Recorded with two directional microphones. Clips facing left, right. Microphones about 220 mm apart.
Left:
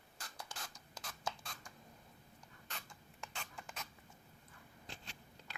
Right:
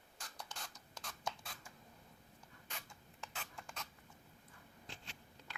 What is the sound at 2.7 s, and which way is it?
Rodents, 5° right (ahead or behind).